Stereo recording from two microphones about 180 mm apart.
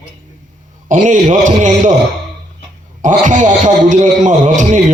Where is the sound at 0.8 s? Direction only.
45° right (ahead or behind).